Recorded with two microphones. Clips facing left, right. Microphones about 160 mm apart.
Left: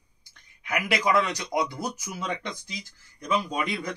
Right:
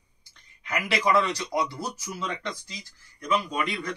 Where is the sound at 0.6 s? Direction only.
15° left (ahead or behind).